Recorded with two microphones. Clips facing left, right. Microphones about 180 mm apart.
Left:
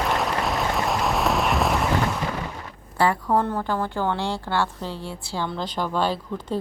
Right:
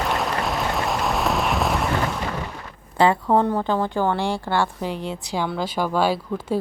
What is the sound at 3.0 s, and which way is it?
A woman's voice, 25° right (ahead or behind).